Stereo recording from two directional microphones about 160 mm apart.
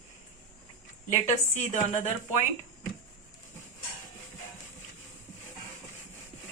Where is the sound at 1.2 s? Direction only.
50° left (ahead or behind).